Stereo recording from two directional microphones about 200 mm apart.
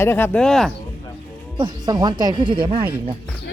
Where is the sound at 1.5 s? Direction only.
20° right (ahead or behind).